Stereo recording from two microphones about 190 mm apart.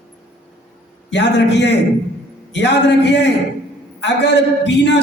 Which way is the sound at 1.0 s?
65° left (ahead or behind).